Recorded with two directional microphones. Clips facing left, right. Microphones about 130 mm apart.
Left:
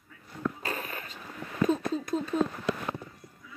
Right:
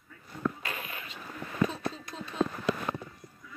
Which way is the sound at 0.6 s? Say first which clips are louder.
Left 4 dB; 40° left (ahead or behind).